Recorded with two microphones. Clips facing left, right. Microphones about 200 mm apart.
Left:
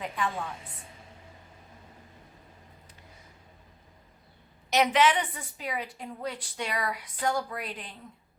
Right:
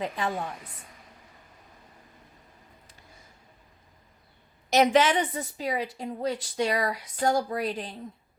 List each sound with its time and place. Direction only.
0.0 s speech: 40° right (ahead or behind)
4.7 s speech: 45° right (ahead or behind)